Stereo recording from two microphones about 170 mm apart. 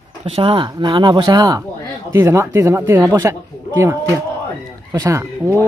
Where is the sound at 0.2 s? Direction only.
35° right (ahead or behind); by 5.6 s 15° right (ahead or behind).